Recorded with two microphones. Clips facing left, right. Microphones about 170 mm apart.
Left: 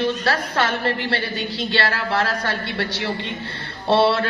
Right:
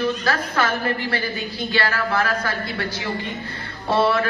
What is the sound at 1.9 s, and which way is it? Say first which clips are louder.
Music: even; 30° left (ahead or behind).